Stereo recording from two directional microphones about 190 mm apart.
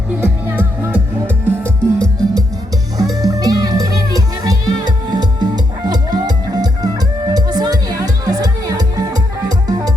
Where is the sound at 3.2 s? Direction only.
20° right (ahead or behind).